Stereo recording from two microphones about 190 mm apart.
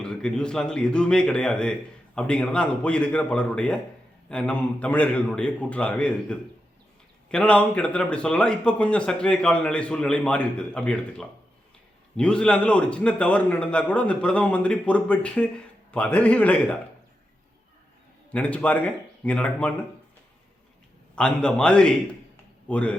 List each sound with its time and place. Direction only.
0.0 s a man's voice: 5° left (ahead or behind)
18.3 s a man's voice: 5° left (ahead or behind)
21.2 s a man's voice: 5° left (ahead or behind)